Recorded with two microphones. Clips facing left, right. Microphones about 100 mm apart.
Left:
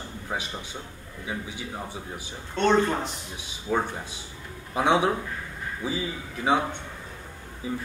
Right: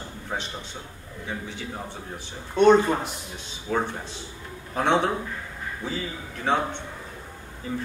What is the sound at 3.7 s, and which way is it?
A man's voice, 10° left (ahead or behind).